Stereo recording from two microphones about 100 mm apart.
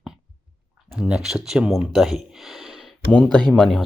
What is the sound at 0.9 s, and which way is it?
Speech, 10° right (ahead or behind).